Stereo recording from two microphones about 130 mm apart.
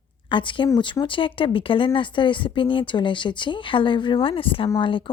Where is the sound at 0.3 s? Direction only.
40° left (ahead or behind).